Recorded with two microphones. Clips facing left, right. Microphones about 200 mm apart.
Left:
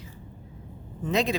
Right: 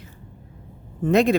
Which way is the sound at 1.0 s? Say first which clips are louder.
Right 8 dB; 55° right (ahead or behind).